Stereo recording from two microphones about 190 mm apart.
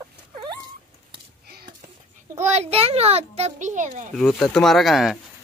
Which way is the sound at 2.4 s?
35° right (ahead or behind).